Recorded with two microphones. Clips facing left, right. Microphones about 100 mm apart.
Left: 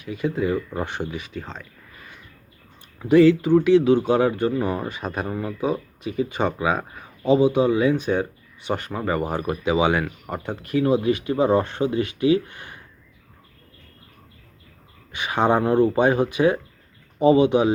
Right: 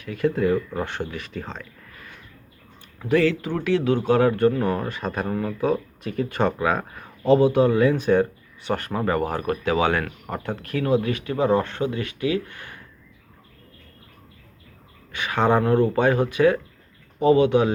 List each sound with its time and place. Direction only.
0.0 s speech: 10° left (ahead or behind)
3.0 s speech: 15° left (ahead or behind)
15.1 s speech: 20° left (ahead or behind)